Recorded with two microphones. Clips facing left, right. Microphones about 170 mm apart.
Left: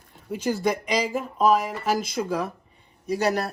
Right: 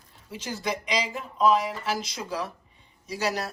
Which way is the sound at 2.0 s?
55° left (ahead or behind).